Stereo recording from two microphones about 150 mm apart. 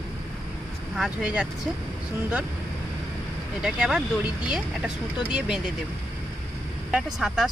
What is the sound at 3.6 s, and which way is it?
Speech, 5° right (ahead or behind).